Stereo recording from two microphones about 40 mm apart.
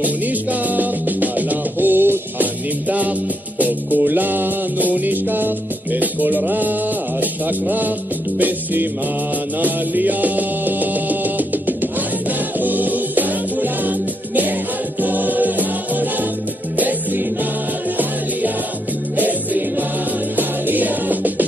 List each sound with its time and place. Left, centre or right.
0.0 s music: right
2.9 s music: right
19.1 s music: right